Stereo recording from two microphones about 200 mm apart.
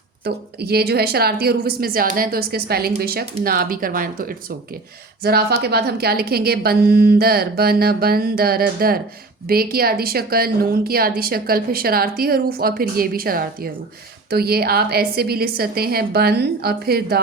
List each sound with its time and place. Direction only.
0.3 s a woman's voice: 50° right (ahead or behind)